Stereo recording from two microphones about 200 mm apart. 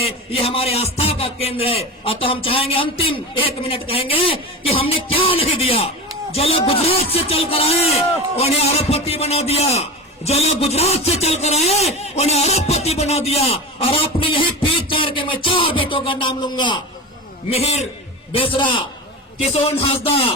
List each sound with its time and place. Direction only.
0.0 s a man's voice: 30° left (ahead or behind)
19.9 s a man's voice: 30° left (ahead or behind)